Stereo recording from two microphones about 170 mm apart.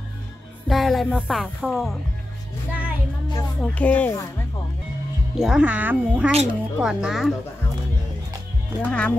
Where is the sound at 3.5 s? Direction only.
5° left (ahead or behind).